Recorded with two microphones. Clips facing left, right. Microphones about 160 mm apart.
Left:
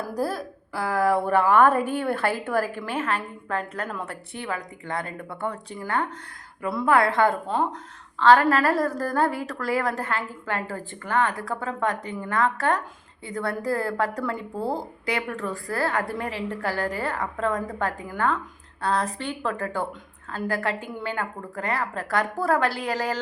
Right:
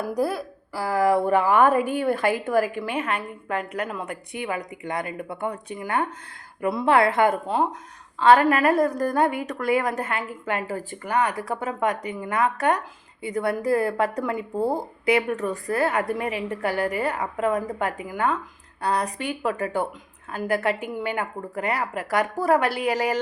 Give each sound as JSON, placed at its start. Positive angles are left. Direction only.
{"t": 0.1, "sound": "a woman's voice", "side_deg": -10}